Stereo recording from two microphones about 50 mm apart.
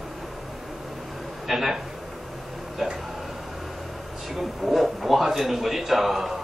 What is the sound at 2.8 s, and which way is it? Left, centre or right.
Speech, centre.